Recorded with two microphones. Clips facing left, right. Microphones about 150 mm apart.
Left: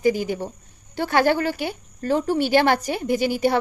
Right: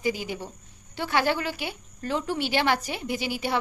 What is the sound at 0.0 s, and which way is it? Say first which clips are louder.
A woman's voice: left 8 dB; 45° left (ahead or behind).